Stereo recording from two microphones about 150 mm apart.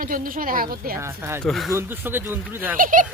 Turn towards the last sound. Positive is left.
turn(degrees=-60)  # may be behind; listen again after turning